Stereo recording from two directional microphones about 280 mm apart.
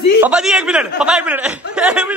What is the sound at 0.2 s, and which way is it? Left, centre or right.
A man's voice, centre.